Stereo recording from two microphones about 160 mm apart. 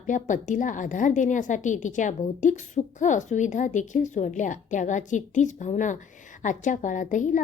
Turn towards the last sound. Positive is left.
turn(degrees=50)  # may be behind; listen again after turning